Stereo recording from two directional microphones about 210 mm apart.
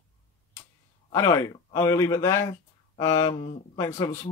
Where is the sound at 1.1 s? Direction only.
15° left (ahead or behind).